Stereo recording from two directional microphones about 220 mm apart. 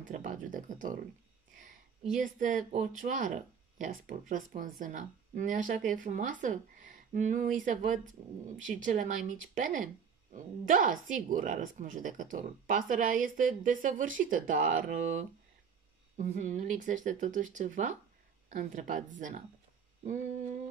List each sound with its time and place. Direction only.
0.0 s speech: 35° right (ahead or behind)
2.2 s speech: 35° right (ahead or behind)